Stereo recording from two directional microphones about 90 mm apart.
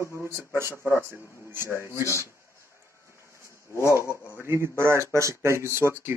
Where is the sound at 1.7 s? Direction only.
30° left (ahead or behind).